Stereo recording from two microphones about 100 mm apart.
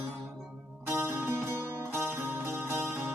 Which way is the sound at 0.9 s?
25° right (ahead or behind).